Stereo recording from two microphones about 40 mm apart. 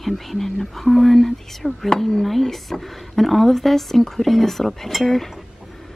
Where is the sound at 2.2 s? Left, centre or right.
Centre.